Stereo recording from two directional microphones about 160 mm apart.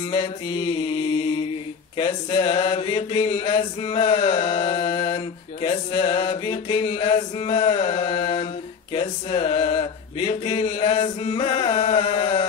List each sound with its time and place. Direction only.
0.1 s mantra: 30° left (ahead or behind)